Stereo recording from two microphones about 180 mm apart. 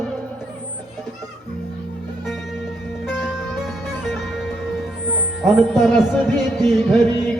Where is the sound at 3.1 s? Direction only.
5° right (ahead or behind).